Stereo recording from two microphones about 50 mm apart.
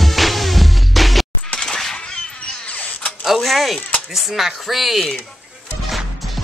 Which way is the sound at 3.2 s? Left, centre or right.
Centre.